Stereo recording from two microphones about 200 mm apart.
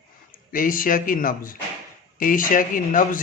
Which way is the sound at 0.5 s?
45° left (ahead or behind).